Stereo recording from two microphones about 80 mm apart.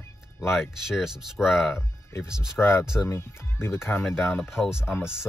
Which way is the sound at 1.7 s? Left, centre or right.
Left.